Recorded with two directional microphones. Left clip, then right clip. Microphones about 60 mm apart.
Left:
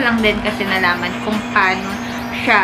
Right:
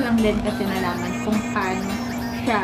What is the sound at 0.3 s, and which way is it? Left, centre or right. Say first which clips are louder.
Speech: left 6 dB; left.